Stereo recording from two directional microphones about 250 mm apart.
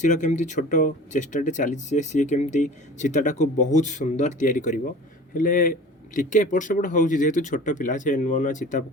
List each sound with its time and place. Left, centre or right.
0.0 s speech: left